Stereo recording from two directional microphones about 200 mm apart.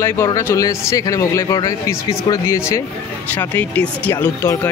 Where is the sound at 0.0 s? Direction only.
15° left (ahead or behind).